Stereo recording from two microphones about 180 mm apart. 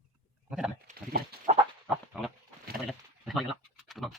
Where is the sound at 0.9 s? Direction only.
40° right (ahead or behind).